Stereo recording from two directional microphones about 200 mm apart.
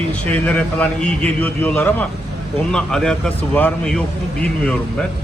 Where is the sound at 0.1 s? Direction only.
5° left (ahead or behind).